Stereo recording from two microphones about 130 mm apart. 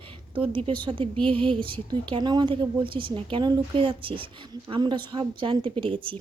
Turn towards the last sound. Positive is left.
turn(degrees=-40)  # may be behind; listen again after turning